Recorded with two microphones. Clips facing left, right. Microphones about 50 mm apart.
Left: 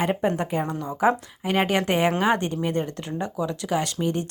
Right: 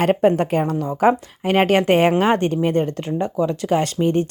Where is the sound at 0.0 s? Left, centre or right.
Right.